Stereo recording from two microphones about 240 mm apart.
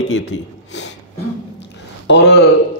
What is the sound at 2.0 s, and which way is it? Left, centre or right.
Speech, left.